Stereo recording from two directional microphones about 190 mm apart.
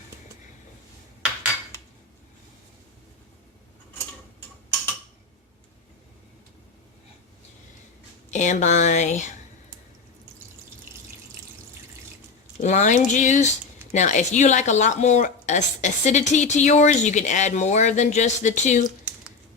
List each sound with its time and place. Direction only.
8.3 s speech: 40° left (ahead or behind)
12.6 s speech: 40° left (ahead or behind)